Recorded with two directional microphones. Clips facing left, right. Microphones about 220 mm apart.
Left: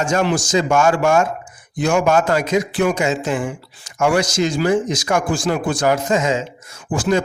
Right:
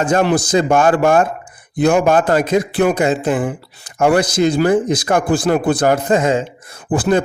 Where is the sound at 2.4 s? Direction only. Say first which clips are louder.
Right 3 dB; 55° right (ahead or behind).